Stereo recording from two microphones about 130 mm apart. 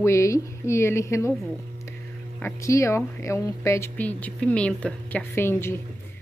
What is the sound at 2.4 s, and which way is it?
Speech, 20° left (ahead or behind).